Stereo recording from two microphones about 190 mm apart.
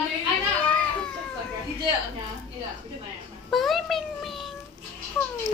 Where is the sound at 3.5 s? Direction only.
Centre (ahead or behind).